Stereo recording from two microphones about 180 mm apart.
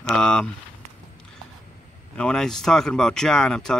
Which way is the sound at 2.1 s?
5° left (ahead or behind).